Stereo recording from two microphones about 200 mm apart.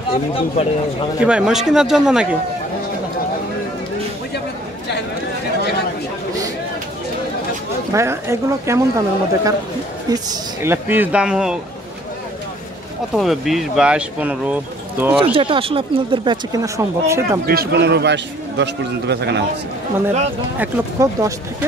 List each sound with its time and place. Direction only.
0.1 s speech: 30° left (ahead or behind)
1.2 s speech: 5° right (ahead or behind)
7.9 s speech: 15° right (ahead or behind)
13.1 s speech: centre (ahead or behind)
15.3 s speech: 25° right (ahead or behind)
17.5 s a man's voice: 50° right (ahead or behind)
20.5 s speech: 10° right (ahead or behind)